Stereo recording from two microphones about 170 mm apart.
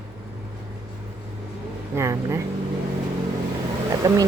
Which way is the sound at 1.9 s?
15° right (ahead or behind).